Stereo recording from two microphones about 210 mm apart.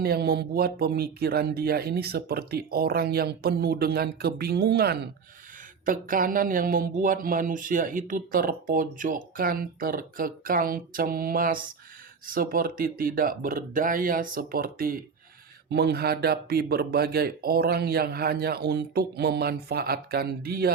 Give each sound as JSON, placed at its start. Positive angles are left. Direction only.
{"t": 0.0, "sound": "speech", "side_deg": -50}